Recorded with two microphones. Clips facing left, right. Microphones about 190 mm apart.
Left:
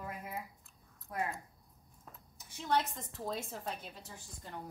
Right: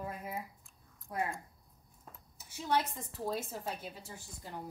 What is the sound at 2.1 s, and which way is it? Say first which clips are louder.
A woman's voice: right 3 dB; 5° right (ahead or behind).